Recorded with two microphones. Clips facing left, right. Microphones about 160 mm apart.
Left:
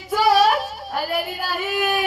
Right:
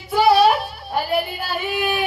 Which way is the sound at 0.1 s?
45° left (ahead or behind).